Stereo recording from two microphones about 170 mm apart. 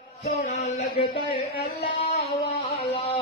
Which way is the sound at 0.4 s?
45° left (ahead or behind).